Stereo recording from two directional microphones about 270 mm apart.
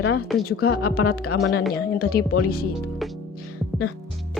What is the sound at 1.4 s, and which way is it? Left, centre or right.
Speech, left.